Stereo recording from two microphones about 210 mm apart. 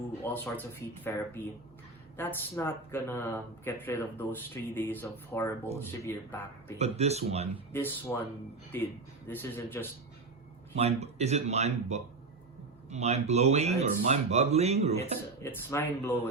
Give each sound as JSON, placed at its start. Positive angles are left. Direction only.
{"t": 0.2, "sound": "speech", "side_deg": 10}
{"t": 6.7, "sound": "speech", "side_deg": -30}
{"t": 7.7, "sound": "speech", "side_deg": 10}
{"t": 10.8, "sound": "speech", "side_deg": -30}
{"t": 15.4, "sound": "speech", "side_deg": 10}